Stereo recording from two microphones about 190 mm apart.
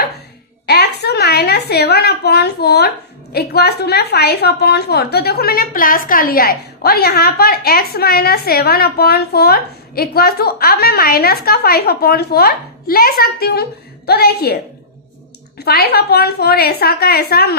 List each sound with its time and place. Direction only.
0.7 s a sound: 60° left (ahead or behind)
3.3 s a woman's voice: 55° left (ahead or behind)
15.5 s a woman's voice: 55° left (ahead or behind)